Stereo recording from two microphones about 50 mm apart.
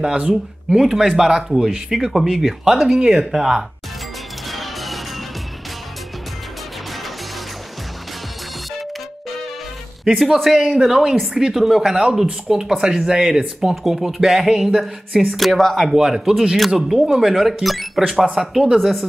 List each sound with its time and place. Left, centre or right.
0.0 s speech: centre
0.7 s speech: centre
4.5 s music: centre
10.0 s speech: centre
15.9 s speech: centre
18.8 s speech: centre